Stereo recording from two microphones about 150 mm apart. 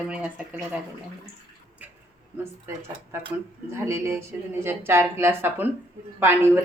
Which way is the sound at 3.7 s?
15° right (ahead or behind).